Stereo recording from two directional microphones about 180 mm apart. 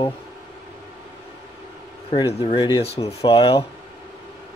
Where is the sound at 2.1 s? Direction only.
30° left (ahead or behind).